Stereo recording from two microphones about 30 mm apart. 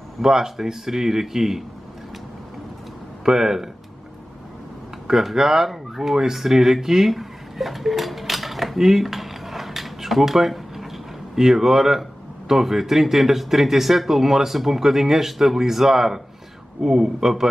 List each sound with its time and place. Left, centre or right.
0.2 s speech: centre
3.3 s speech: centre
5.0 s speech: centre
8.7 s dishes: centre
11.3 s speech: centre